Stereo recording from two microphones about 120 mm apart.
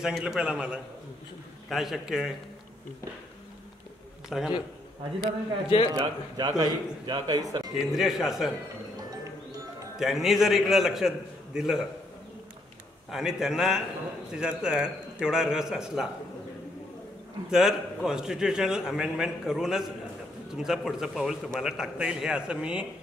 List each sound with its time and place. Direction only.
0.0 s a man's voice: 5° right (ahead or behind)
4.3 s a man's voice: centre (ahead or behind)
5.9 s a man's voice: 35° right (ahead or behind)
7.8 s a man's voice: centre (ahead or behind)
9.9 s a man's voice: 5° right (ahead or behind)
13.1 s a man's voice: 5° right (ahead or behind)
17.5 s a man's voice: 5° right (ahead or behind)